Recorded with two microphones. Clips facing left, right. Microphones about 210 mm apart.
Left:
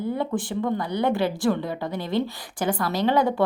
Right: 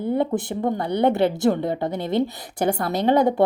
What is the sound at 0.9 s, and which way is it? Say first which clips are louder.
A woman's voice: right 6 dB; 25° right (ahead or behind).